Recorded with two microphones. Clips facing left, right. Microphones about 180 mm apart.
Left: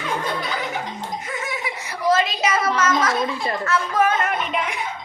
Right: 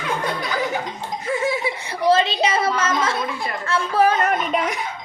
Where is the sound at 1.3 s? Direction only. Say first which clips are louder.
Right 12 dB; 30° right (ahead or behind).